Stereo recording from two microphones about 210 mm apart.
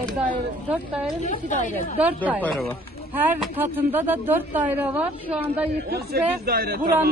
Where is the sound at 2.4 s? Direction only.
5° left (ahead or behind).